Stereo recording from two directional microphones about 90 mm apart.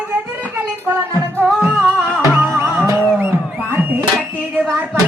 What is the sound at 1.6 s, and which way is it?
Music, 15° right (ahead or behind).